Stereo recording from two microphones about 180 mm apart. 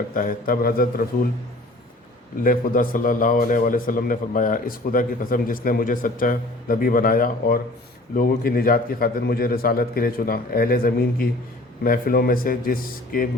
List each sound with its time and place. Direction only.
0.1 s a man's voice: 50° left (ahead or behind)
2.4 s a man's voice: 50° left (ahead or behind)